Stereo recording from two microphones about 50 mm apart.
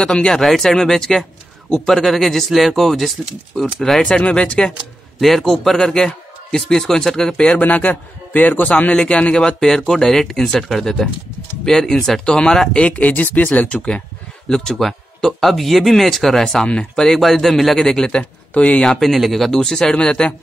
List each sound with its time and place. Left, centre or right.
0.0 s a man's voice: centre
4.1 s speech: left
5.2 s a man's voice: centre
7.6 s a man's voice: left
9.3 s a man's voice: centre
12.8 s a man's voice: left
13.7 s speech: left
14.5 s speech: centre
16.6 s speech: left
17.0 s speech: centre
18.5 s speech: left
18.8 s a man's voice: centre